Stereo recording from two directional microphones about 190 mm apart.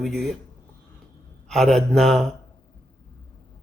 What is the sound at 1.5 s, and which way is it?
Speech, centre (ahead or behind).